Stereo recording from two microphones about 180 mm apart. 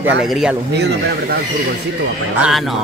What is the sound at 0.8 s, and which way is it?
Speech, 65° right (ahead or behind).